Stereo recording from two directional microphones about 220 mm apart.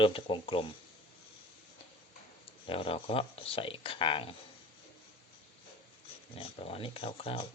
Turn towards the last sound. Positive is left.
turn(degrees=25)  # may be behind; listen again after turning